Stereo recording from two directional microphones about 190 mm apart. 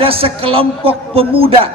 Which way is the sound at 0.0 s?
30° right (ahead or behind).